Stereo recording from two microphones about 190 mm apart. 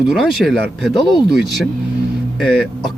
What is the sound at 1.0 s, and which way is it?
Speech, 20° left (ahead or behind).